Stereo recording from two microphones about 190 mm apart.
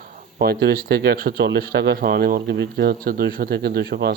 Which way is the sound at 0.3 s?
55° right (ahead or behind).